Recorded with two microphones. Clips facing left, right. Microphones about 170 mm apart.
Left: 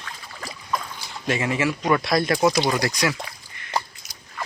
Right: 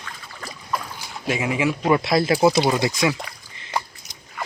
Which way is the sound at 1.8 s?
25° right (ahead or behind).